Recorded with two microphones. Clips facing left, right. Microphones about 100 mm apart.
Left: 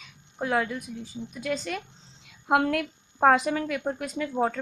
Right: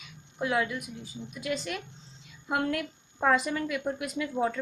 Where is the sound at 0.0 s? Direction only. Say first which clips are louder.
Left 1 dB; 40° left (ahead or behind).